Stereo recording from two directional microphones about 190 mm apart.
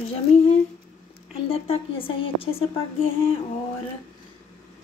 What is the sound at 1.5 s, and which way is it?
A woman's voice, 30° left (ahead or behind).